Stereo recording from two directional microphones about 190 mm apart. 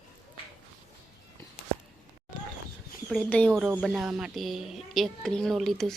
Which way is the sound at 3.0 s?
5° left (ahead or behind).